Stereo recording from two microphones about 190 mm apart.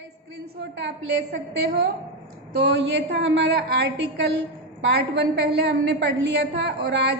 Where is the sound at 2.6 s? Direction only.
65° right (ahead or behind).